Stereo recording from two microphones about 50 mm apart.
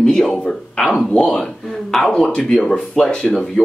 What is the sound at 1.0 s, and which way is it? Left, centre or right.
Speech, centre.